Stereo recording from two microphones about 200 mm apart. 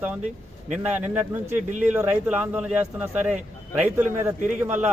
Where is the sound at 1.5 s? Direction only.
35° right (ahead or behind).